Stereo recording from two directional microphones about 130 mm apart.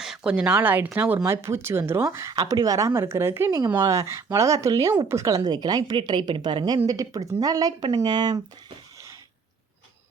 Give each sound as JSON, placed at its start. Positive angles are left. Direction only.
{"t": 0.0, "sound": "speech", "side_deg": -5}